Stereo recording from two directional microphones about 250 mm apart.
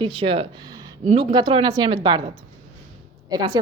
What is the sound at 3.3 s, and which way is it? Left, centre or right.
Speech, centre.